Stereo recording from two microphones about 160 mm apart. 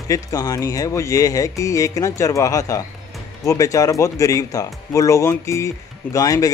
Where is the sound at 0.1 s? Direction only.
20° left (ahead or behind).